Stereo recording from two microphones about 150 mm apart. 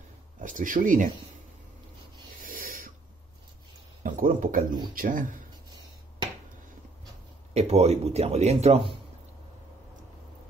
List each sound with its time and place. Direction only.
0.4 s speech: 60° right (ahead or behind)
2.4 s owl: 70° right (ahead or behind)
4.0 s speech: 65° right (ahead or behind)
7.5 s speech: 45° right (ahead or behind)